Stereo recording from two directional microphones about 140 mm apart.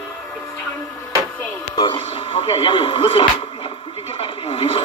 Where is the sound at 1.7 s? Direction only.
35° left (ahead or behind).